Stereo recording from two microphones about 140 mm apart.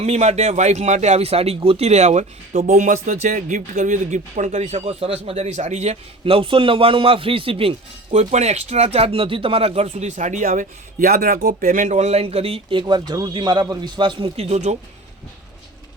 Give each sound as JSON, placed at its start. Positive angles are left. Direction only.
{"t": 0.0, "sound": "speech", "side_deg": -50}
{"t": 2.6, "sound": "speech", "side_deg": -60}
{"t": 8.1, "sound": "speech", "side_deg": -55}